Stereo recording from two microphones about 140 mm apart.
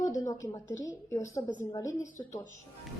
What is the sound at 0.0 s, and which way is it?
A woman's voice, 20° left (ahead or behind).